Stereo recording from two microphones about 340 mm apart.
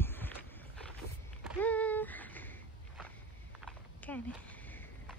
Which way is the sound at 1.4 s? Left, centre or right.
Centre.